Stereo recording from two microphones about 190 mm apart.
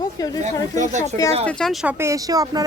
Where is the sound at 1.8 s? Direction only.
15° right (ahead or behind).